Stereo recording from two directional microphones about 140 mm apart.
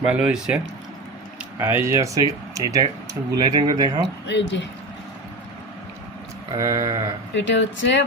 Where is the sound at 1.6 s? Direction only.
15° right (ahead or behind).